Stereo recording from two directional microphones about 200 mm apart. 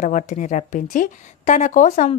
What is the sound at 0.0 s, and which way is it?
A woman's voice, 40° left (ahead or behind).